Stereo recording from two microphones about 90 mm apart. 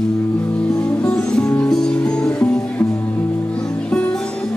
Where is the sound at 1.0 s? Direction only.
15° left (ahead or behind).